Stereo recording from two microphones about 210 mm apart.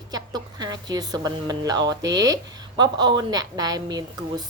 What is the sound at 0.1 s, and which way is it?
A woman's voice, 20° right (ahead or behind).